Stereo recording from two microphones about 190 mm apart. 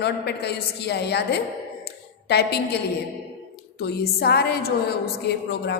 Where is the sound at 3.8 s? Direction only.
55° left (ahead or behind).